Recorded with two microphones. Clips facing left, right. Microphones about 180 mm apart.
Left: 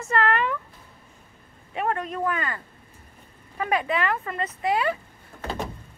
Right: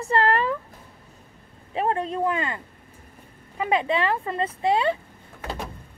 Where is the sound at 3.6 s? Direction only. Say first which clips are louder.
Right 2 dB; 25° right (ahead or behind).